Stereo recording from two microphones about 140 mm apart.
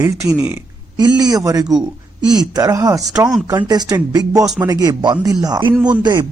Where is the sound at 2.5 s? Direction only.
25° right (ahead or behind).